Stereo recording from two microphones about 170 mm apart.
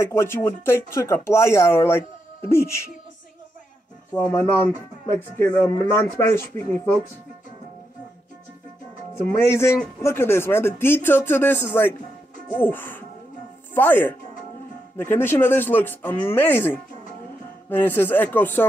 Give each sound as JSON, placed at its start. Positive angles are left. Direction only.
{"t": 0.0, "sound": "speech", "side_deg": 15}
{"t": 4.1, "sound": "speech", "side_deg": 15}
{"t": 9.5, "sound": "speech", "side_deg": 15}